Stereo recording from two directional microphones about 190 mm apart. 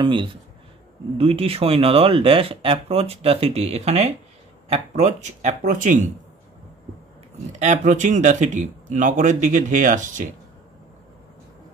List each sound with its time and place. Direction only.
0.0 s speech: 25° right (ahead or behind); by 6.1 s 40° right (ahead or behind)
7.5 s speech: 40° right (ahead or behind)